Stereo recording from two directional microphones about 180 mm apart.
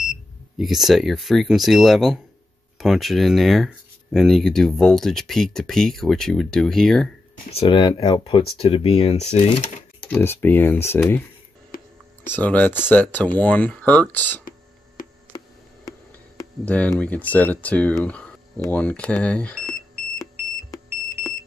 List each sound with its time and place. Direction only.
0.6 s speech: centre (ahead or behind)
7.5 s speech: 30° left (ahead or behind)
9.9 s speech: 10° left (ahead or behind)
11.7 s whispering: 50° left (ahead or behind)
12.3 s speech: 10° left (ahead or behind)
15.0 s a sound: 50° left (ahead or behind)
16.6 s speech: 5° left (ahead or behind)